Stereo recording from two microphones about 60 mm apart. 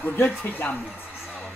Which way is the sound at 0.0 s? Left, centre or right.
Left.